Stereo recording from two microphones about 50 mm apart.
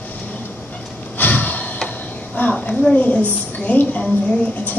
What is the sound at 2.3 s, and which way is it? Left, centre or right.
Speech, left.